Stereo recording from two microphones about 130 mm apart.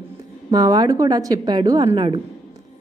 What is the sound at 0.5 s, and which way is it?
A woman's voice, 30° right (ahead or behind).